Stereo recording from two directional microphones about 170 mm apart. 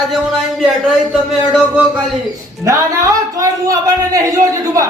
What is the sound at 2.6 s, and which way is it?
Speech, 20° right (ahead or behind).